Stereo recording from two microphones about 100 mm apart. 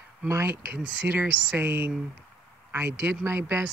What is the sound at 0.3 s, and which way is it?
Speech, 25° right (ahead or behind).